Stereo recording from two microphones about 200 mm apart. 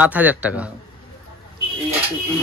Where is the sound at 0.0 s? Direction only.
10° right (ahead or behind).